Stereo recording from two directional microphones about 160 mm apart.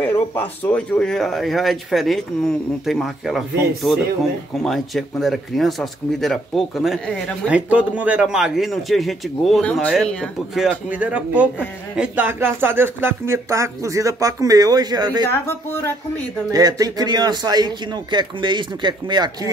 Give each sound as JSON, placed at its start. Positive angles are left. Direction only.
{"t": 0.0, "sound": "a man's voice", "side_deg": 10}
{"t": 15.2, "sound": "speech", "side_deg": 15}
{"t": 16.5, "sound": "speech", "side_deg": -25}